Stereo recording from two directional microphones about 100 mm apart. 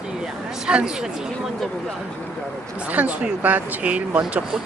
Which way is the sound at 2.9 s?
15° right (ahead or behind).